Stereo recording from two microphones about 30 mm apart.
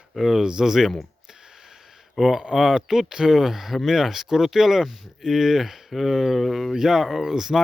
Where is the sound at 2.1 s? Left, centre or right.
Centre.